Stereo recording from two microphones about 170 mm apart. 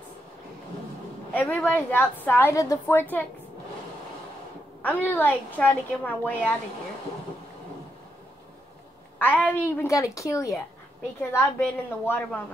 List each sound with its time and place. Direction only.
1.3 s a woman's voice: 5° left (ahead or behind)
4.8 s a woman's voice: 10° left (ahead or behind)
9.2 s a woman's voice: 10° left (ahead or behind)
11.6 s a woman's voice: 10° left (ahead or behind)